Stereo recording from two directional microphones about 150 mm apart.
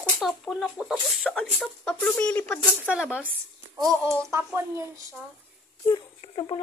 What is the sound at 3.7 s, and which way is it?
A child's voice, 25° right (ahead or behind).